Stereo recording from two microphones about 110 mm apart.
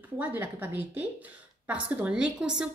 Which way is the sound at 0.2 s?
15° right (ahead or behind).